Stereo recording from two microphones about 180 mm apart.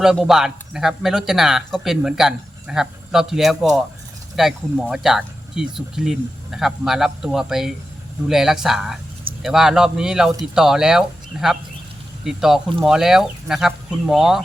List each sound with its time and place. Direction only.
0.0 s speech: centre (ahead or behind)